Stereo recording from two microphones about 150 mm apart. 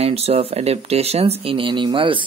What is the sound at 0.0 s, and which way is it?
Speech, 40° right (ahead or behind).